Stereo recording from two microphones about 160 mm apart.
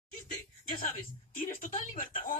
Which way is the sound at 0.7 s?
60° left (ahead or behind).